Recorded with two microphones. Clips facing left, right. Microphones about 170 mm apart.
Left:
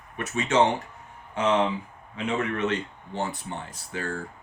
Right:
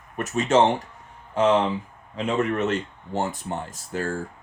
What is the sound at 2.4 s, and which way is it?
Speech, 45° right (ahead or behind).